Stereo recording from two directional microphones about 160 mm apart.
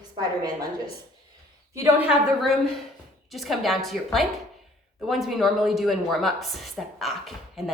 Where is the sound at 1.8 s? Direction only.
10° right (ahead or behind).